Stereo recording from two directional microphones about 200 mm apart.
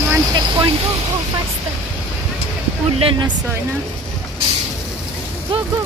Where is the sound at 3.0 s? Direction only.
25° right (ahead or behind).